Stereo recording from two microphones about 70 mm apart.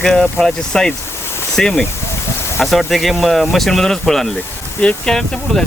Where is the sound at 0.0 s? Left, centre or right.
Centre.